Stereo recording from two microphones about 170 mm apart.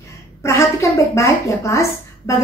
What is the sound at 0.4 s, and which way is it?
A woman's voice, 15° left (ahead or behind).